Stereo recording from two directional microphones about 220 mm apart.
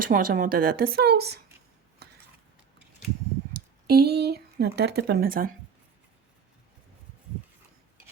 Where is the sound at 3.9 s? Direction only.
45° right (ahead or behind).